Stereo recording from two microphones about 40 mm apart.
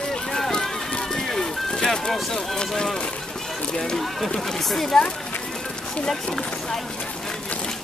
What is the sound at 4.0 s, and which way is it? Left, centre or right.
Run, centre.